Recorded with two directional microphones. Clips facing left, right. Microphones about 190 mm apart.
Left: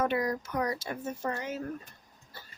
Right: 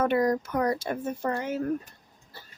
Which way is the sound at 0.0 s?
50° right (ahead or behind).